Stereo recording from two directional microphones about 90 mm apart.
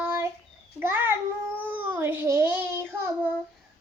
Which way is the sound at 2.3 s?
25° right (ahead or behind).